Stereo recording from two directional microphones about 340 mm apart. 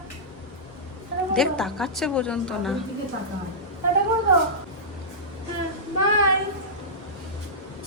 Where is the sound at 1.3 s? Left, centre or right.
Centre.